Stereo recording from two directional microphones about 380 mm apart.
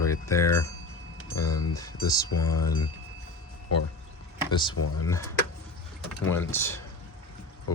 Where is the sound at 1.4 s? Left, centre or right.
Left.